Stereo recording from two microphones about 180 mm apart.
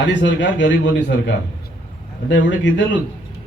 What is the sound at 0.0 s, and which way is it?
A man's voice, 90° left.